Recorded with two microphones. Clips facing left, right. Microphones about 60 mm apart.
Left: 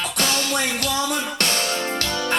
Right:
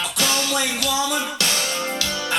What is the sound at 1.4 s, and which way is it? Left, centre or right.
Music, left.